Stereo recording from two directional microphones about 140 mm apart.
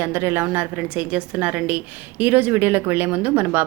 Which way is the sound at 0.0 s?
15° right (ahead or behind).